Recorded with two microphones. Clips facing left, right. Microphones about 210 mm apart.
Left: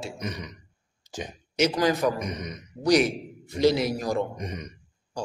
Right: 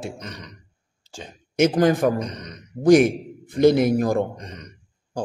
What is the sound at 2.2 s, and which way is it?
Speech, 10° left (ahead or behind).